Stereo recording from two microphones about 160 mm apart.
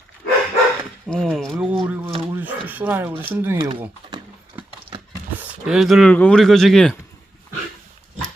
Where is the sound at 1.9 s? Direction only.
15° right (ahead or behind).